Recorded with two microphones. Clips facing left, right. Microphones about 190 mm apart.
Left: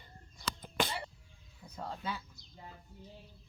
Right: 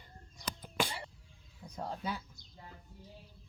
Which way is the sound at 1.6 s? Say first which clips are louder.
Right 2 dB; 10° right (ahead or behind).